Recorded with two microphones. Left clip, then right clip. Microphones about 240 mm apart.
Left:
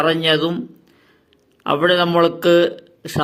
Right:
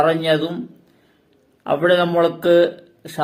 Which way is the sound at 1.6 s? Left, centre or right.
Left.